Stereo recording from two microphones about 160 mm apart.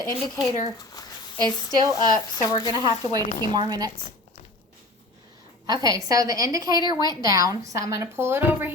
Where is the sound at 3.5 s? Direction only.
25° right (ahead or behind).